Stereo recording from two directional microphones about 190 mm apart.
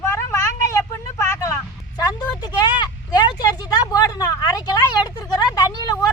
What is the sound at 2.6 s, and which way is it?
Vehicle, 20° left (ahead or behind).